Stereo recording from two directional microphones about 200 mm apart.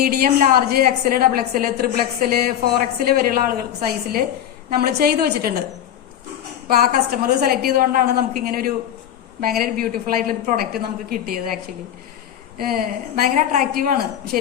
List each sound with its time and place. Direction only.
0.0 s a woman's voice: 50° right (ahead or behind)
6.7 s a woman's voice: 50° right (ahead or behind)